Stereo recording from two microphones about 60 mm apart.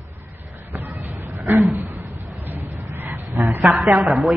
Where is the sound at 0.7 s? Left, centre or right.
Right.